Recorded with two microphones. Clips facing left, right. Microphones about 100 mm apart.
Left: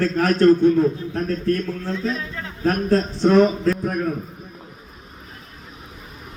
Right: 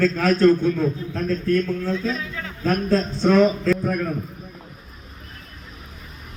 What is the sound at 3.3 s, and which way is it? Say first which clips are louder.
Speech: left 1 dB; 35° left (ahead or behind).